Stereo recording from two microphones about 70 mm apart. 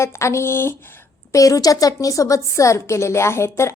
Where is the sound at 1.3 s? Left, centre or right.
Left.